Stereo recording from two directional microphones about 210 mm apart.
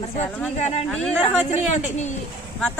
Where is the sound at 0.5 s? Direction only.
30° left (ahead or behind).